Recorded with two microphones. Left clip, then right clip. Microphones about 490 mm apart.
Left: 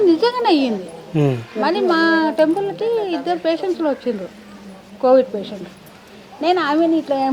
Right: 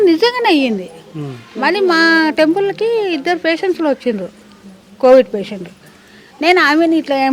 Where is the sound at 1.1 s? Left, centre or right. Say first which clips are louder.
Left 11 dB; left.